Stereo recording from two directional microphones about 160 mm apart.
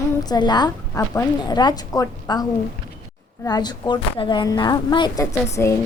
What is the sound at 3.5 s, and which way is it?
A woman's voice, 25° left (ahead or behind).